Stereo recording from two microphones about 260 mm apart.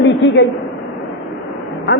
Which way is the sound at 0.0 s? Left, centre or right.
Left.